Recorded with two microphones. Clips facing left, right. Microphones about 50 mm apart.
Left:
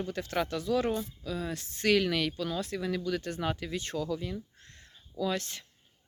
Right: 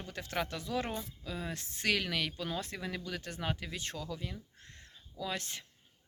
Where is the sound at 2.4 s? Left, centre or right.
Right.